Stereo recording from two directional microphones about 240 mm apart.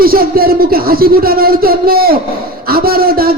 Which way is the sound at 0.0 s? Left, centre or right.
Right.